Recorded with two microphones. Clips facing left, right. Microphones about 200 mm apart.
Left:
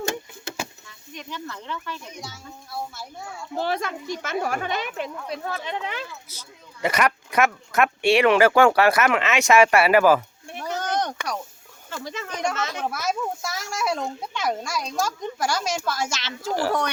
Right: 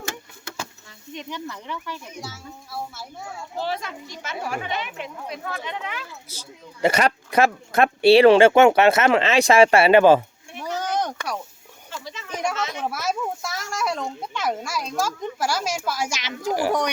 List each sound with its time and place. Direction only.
1.1 s a child's voice: 20° right (ahead or behind)
3.6 s speech: 55° left (ahead or behind); by 6.1 s 30° left (ahead or behind)
6.8 s speech: 30° right (ahead or behind)
10.6 s a sound: 10° right (ahead or behind)
11.9 s speech: 50° left (ahead or behind)
12.3 s speech: 5° right (ahead or behind)